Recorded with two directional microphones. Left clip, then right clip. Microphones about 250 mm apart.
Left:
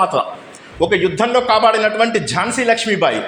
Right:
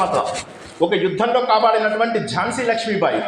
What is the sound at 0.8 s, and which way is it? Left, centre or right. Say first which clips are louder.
A man's voice: left 3 dB; left.